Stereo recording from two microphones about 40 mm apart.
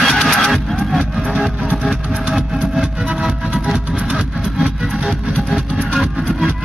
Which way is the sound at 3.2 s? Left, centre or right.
Centre.